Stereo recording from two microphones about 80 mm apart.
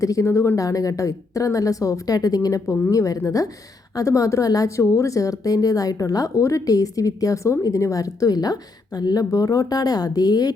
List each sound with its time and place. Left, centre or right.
0.0 s speech: left